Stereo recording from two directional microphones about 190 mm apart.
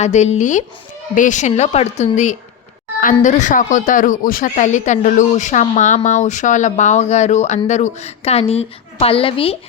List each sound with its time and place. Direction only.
0.0 s speech: 35° left (ahead or behind)